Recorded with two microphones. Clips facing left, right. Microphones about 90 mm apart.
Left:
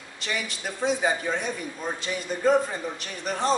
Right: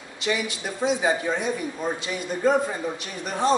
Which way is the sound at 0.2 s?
5° right (ahead or behind).